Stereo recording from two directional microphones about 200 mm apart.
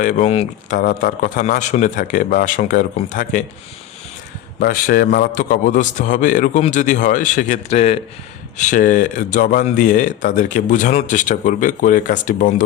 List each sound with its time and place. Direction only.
0.0 s speech: 35° left (ahead or behind)
4.6 s speech: 45° left (ahead or behind)